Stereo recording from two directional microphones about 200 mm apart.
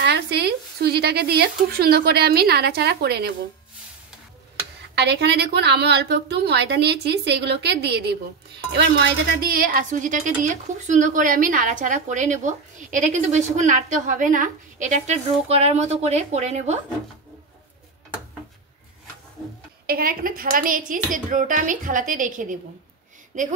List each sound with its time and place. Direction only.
0.0 s speech: 55° right (ahead or behind)
4.9 s a woman's voice: 55° right (ahead or behind); by 16.8 s 35° right (ahead or behind)
19.9 s speech: 45° right (ahead or behind)